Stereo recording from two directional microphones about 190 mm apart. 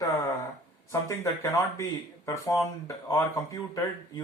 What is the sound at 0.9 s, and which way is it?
Speech, 15° left (ahead or behind).